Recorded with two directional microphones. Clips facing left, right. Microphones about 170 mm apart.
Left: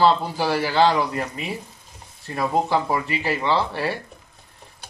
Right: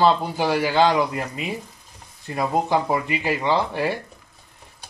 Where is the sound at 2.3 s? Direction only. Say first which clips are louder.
Even; 15° right (ahead or behind).